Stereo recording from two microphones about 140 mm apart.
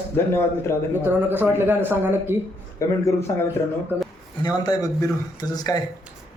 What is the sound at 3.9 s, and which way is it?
Speech, 15° right (ahead or behind).